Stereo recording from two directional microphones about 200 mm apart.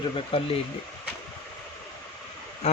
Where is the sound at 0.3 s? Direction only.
30° left (ahead or behind).